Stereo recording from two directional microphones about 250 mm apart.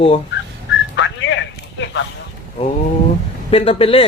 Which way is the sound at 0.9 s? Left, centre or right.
Left.